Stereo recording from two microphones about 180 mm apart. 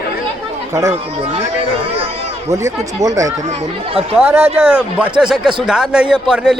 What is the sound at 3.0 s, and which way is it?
A man's voice, 20° right (ahead or behind).